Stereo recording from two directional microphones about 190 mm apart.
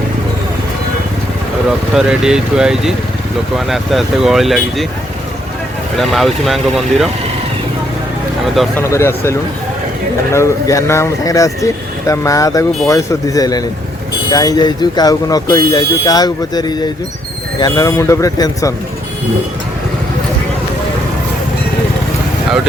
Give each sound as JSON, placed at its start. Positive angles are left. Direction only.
{"t": 2.0, "sound": "speech", "side_deg": -5}
{"t": 6.0, "sound": "speech", "side_deg": 0}
{"t": 8.8, "sound": "speech", "side_deg": 15}
{"t": 10.3, "sound": "speech", "side_deg": 15}